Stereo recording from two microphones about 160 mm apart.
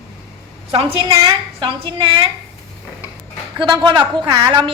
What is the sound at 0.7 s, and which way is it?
A woman's voice, 35° right (ahead or behind).